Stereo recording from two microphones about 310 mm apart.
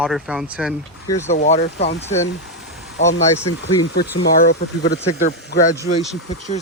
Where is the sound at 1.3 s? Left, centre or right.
Left.